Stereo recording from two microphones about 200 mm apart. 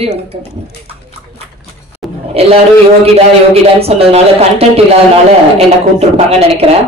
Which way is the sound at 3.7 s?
30° right (ahead or behind).